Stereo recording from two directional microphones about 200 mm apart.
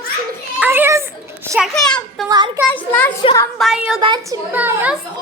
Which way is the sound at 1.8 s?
5° left (ahead or behind).